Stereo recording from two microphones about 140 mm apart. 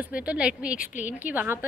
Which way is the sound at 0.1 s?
10° right (ahead or behind).